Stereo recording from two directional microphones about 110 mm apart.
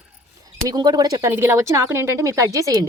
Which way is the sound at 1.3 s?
25° right (ahead or behind).